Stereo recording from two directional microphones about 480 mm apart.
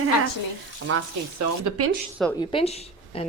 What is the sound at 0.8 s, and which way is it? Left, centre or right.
Speech, right.